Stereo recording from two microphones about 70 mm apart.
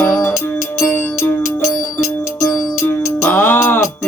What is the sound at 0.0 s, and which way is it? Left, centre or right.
Music, left.